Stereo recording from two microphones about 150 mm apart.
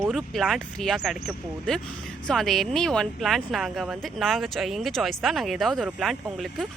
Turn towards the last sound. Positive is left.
turn(degrees=0)  # may be behind; listen again after turning